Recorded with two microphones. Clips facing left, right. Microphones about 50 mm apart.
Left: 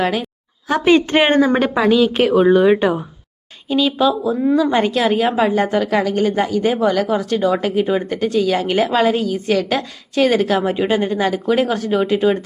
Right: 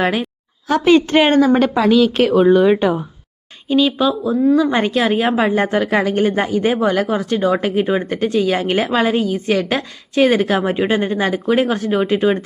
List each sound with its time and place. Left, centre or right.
0.0 s speech: centre
0.7 s a woman's voice: centre
3.7 s speech: centre